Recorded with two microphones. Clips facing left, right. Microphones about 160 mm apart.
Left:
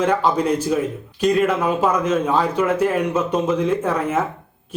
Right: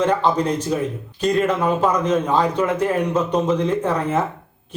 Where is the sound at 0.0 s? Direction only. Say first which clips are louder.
Even; 10° left (ahead or behind).